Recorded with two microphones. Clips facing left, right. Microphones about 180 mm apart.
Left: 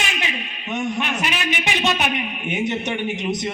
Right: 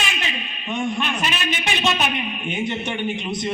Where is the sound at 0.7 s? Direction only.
20° left (ahead or behind).